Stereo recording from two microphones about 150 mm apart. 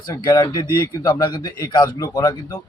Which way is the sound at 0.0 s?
25° left (ahead or behind).